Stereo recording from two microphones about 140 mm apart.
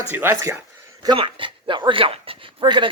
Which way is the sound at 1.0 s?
35° right (ahead or behind).